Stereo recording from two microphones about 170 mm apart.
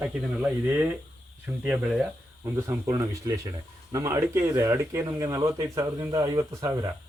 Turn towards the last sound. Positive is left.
turn(degrees=-20)  # may be behind; listen again after turning